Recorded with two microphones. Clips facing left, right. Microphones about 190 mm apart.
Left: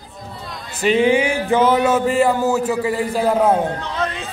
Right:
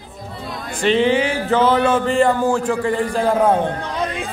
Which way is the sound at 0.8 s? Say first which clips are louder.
Left 1 dB; 10° left (ahead or behind).